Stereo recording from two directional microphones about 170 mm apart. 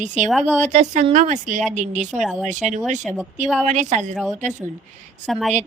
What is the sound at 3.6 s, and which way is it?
Speech, 45° right (ahead or behind).